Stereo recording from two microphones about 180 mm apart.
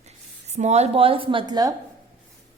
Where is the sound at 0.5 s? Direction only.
35° right (ahead or behind); by 1.7 s 20° right (ahead or behind).